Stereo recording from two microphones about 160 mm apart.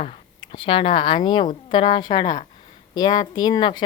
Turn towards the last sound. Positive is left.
turn(degrees=25)  # may be behind; listen again after turning